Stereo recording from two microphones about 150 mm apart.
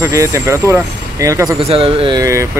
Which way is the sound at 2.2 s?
20° right (ahead or behind).